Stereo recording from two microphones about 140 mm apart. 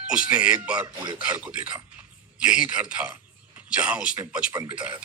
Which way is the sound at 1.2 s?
10° right (ahead or behind).